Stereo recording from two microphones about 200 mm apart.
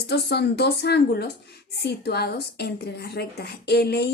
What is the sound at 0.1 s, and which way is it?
A woman's voice, 55° left (ahead or behind).